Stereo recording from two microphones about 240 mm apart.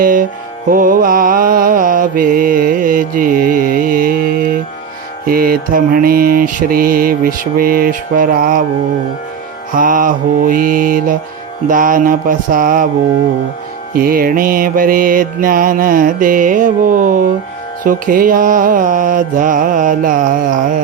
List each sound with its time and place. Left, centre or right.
0.0 s mantra: right
9.7 s mantra: right
13.9 s mantra: right